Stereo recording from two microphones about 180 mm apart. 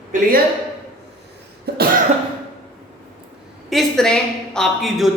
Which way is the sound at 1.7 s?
65° right (ahead or behind).